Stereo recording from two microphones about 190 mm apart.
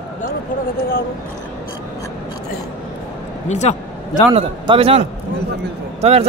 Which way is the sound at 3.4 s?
40° left (ahead or behind).